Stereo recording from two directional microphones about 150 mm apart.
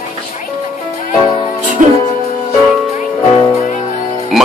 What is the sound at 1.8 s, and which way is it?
Speech, 55° right (ahead or behind).